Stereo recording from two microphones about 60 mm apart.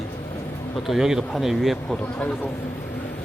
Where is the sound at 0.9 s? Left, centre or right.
Centre.